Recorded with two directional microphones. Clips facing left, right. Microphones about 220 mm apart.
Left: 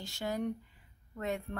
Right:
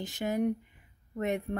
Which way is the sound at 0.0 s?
20° right (ahead or behind).